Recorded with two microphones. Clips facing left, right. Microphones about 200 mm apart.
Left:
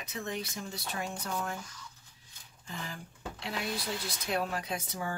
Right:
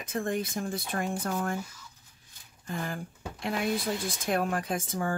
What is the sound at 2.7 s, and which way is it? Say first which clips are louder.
Speech: right 8 dB; 50° right (ahead or behind).